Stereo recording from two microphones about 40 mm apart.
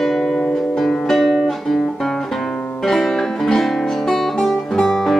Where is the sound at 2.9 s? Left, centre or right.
Centre.